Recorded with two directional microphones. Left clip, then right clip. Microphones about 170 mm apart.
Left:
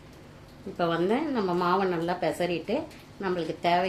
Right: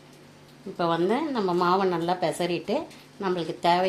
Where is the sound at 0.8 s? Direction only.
35° right (ahead or behind).